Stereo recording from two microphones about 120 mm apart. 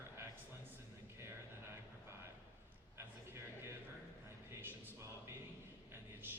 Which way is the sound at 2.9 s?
20° right (ahead or behind).